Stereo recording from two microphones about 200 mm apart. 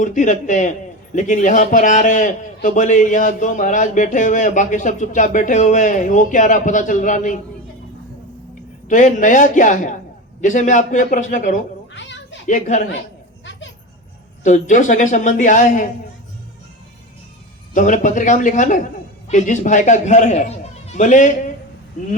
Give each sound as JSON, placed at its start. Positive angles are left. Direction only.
{"t": 0.0, "sound": "a man's voice", "side_deg": 40}
{"t": 8.9, "sound": "a man's voice", "side_deg": 40}
{"t": 11.9, "sound": "cat", "side_deg": 65}
{"t": 12.5, "sound": "a man's voice", "side_deg": 40}
{"t": 13.4, "sound": "children playing", "side_deg": 65}
{"t": 14.4, "sound": "a man's voice", "side_deg": 35}
{"t": 17.7, "sound": "a man's voice", "side_deg": 40}